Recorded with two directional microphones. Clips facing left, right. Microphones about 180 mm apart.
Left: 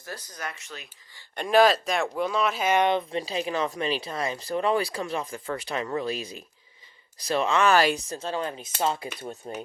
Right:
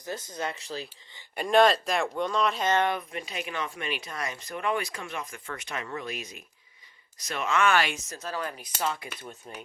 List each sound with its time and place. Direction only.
0.0 s speech: 20° right (ahead or behind)
1.4 s speech: centre (ahead or behind); by 9.5 s 35° left (ahead or behind)